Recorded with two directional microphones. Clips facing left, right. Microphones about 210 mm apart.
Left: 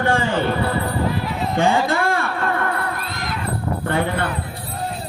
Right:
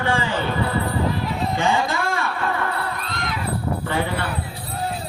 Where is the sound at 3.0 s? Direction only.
5° left (ahead or behind).